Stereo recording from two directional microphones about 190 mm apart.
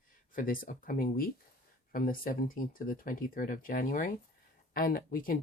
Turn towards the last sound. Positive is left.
turn(degrees=45)  # may be behind; listen again after turning